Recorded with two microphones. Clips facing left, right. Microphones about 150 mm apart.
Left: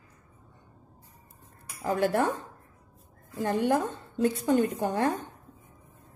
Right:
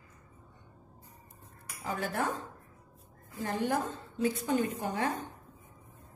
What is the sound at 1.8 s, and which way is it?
A woman's voice, 65° left (ahead or behind).